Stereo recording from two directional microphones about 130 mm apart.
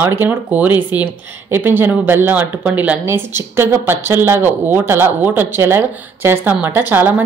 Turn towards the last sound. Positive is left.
turn(degrees=-15)  # may be behind; listen again after turning